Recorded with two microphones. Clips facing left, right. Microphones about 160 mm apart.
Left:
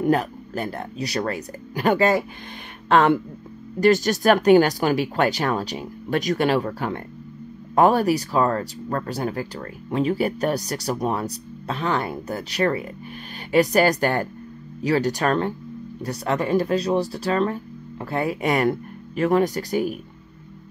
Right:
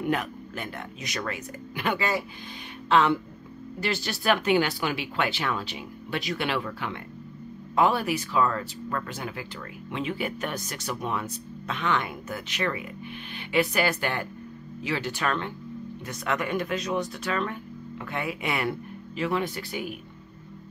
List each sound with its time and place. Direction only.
0.0 s speech: 35° left (ahead or behind)